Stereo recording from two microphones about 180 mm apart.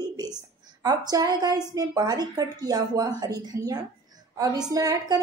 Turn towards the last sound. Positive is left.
turn(degrees=-20)  # may be behind; listen again after turning